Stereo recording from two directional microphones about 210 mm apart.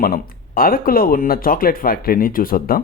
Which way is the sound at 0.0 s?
45° left (ahead or behind).